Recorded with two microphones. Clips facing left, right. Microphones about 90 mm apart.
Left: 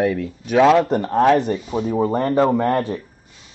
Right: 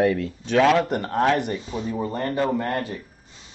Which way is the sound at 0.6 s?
25° left (ahead or behind).